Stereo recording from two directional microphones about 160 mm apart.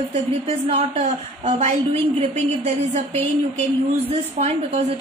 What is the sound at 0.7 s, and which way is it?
A woman's voice, 40° right (ahead or behind).